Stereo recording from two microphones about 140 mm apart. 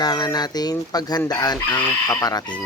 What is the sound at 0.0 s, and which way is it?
Speech, 30° left (ahead or behind).